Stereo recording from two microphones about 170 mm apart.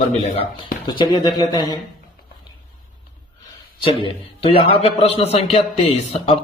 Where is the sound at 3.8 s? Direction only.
30° left (ahead or behind).